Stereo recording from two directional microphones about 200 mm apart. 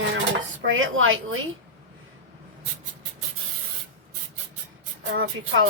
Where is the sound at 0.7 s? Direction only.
85° right.